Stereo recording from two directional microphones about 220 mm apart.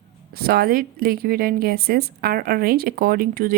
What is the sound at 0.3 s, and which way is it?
A woman's voice, 45° right (ahead or behind).